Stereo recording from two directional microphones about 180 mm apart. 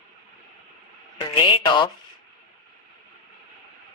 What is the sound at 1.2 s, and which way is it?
Speech, 25° left (ahead or behind).